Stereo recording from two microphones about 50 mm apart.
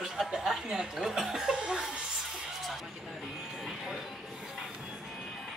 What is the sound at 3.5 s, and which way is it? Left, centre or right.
Music, centre.